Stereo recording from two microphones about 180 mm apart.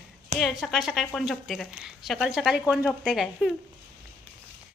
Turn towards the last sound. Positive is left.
turn(degrees=0)  # may be behind; listen again after turning